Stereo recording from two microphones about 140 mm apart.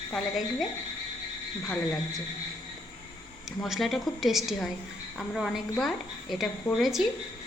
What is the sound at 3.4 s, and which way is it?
A woman's voice, centre (ahead or behind).